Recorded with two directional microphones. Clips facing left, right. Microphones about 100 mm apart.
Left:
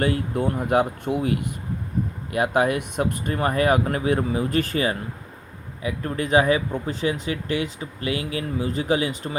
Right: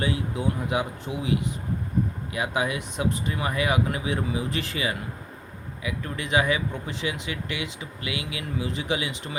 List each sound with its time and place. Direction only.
0.0 s speech: 55° left (ahead or behind)